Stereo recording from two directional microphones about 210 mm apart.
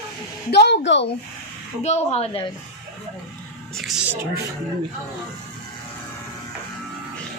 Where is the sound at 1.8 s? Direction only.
30° left (ahead or behind).